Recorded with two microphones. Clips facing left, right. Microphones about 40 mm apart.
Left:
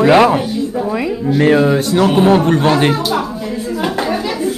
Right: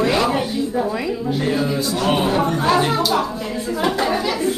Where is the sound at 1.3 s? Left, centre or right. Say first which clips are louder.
Left 11 dB; left.